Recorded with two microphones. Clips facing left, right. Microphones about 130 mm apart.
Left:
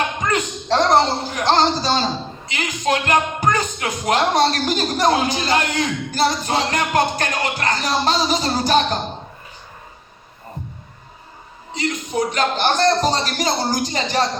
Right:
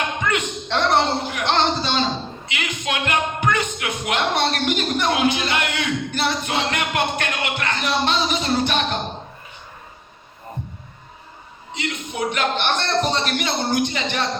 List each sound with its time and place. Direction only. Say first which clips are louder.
0.2 s speech: left 2 dB; 35° left (ahead or behind)
11.7 s speech: left 5 dB; 35° left (ahead or behind)